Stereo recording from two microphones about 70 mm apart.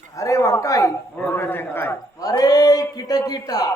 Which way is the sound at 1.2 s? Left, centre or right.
Left.